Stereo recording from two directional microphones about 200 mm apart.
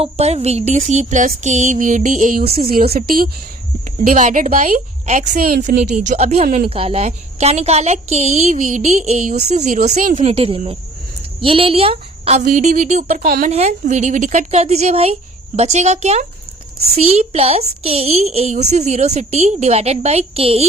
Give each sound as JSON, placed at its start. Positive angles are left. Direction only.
{"t": 0.0, "sound": "a woman's voice", "side_deg": -30}
{"t": 5.8, "sound": "a woman's voice", "side_deg": -35}
{"t": 10.3, "sound": "a woman's voice", "side_deg": -30}